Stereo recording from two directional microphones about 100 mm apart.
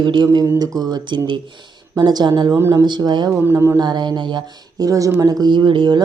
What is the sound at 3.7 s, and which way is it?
Speech, 45° right (ahead or behind).